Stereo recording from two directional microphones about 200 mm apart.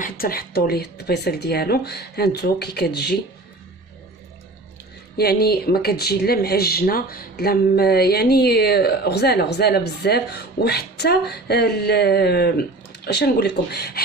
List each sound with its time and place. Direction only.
0.0 s speech: 50° left (ahead or behind)
5.1 s speech: 50° left (ahead or behind)